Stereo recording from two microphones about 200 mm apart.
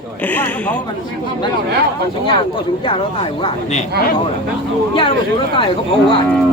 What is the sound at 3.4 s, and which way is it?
Speech, 35° left (ahead or behind).